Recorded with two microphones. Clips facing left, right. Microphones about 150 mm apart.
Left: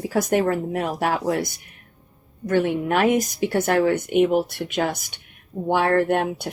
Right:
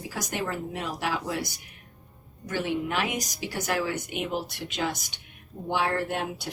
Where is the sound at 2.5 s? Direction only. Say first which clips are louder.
Left 8 dB; 60° left (ahead or behind).